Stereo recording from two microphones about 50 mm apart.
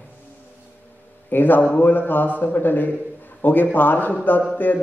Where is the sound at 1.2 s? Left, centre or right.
Left.